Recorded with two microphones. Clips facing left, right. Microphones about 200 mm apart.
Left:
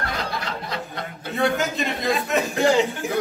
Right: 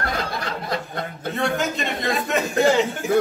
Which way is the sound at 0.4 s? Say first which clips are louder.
Right 3 dB; 50° right (ahead or behind).